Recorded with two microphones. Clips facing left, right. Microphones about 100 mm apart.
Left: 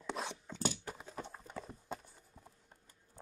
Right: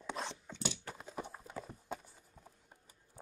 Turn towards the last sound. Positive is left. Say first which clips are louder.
# right 1 dB
turn(degrees=-10)  # may be behind; listen again after turning